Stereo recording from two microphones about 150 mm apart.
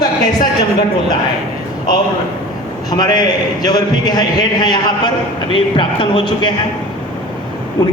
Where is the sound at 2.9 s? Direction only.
30° left (ahead or behind).